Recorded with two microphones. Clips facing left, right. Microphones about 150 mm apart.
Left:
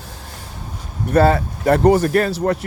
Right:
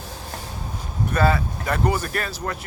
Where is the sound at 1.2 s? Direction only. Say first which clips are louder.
Left 5 dB; 35° left (ahead or behind).